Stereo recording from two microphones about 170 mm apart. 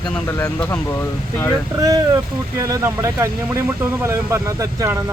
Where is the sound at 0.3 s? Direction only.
10° left (ahead or behind).